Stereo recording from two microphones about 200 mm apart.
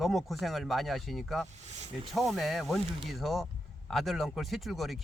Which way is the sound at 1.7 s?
35° right (ahead or behind).